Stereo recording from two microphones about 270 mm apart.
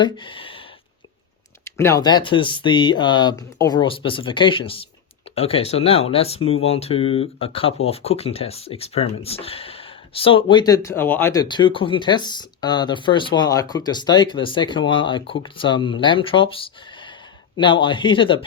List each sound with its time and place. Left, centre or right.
0.0 s speech: centre
1.6 s speech: centre